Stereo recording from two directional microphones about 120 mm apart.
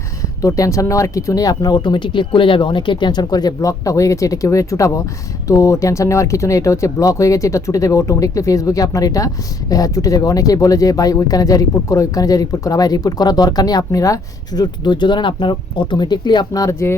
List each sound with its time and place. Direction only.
0.4 s speech: 30° left (ahead or behind)